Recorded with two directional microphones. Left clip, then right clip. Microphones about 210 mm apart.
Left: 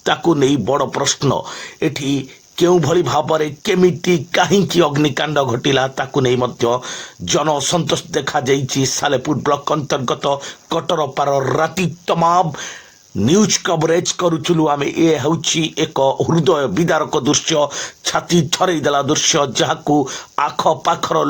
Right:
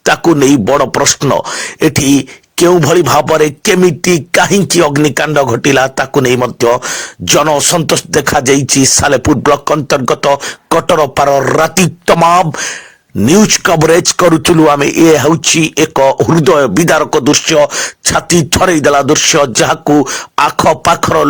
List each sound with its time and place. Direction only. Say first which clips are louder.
0.0 s speech: right 7 dB; 30° right (ahead or behind)